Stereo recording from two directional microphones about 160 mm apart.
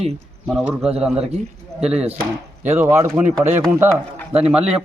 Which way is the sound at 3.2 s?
10° right (ahead or behind).